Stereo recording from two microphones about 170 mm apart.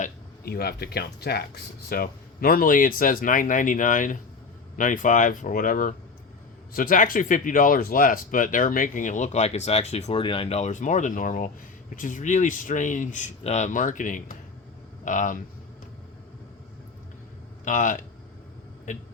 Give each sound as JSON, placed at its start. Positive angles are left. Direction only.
{"t": 0.0, "sound": "speech", "side_deg": 60}
{"t": 17.7, "sound": "speech", "side_deg": 50}